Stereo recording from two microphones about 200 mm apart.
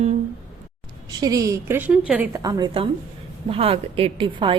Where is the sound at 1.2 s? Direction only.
15° right (ahead or behind).